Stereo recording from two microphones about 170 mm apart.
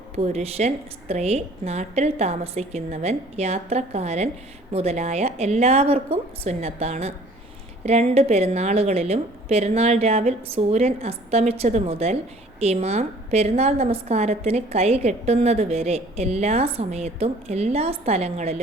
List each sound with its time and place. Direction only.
0.2 s a woman's voice: 40° right (ahead or behind)